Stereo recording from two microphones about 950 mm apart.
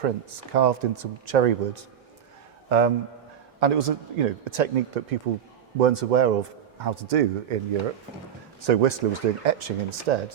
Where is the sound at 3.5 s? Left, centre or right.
Right.